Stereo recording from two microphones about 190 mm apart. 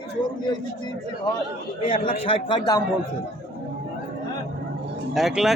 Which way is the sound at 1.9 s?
30° left (ahead or behind).